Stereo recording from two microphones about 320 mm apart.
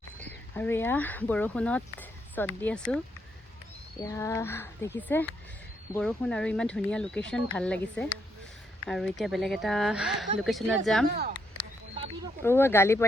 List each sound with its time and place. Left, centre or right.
0.2 s speech: centre
4.0 s speech: centre
11.9 s a sound: centre
12.4 s speech: centre